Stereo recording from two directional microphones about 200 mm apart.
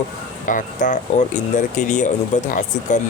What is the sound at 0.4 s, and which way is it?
Speech, 40° left (ahead or behind).